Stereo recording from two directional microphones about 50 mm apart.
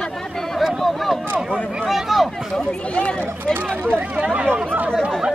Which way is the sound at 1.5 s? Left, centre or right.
Centre.